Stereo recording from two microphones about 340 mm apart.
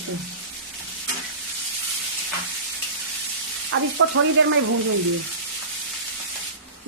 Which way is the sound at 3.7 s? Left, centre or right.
Right.